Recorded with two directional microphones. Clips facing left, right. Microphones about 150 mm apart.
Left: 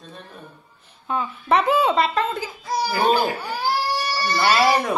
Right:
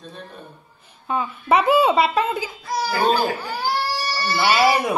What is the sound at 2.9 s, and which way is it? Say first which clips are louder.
Speech: even; 10° left (ahead or behind).